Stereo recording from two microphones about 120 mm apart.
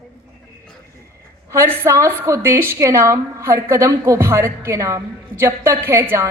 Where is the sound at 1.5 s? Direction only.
25° right (ahead or behind).